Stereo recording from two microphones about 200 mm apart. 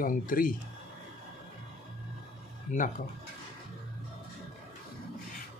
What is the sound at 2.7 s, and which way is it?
Speech, 40° left (ahead or behind).